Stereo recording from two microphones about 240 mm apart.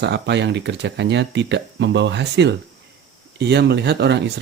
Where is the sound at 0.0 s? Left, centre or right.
Right.